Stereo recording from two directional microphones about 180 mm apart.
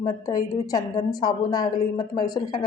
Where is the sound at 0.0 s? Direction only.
25° left (ahead or behind).